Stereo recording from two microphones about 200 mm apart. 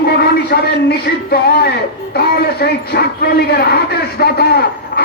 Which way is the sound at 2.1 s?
50° left (ahead or behind).